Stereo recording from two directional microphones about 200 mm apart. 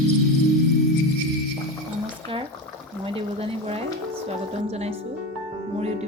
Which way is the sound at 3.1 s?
30° right (ahead or behind).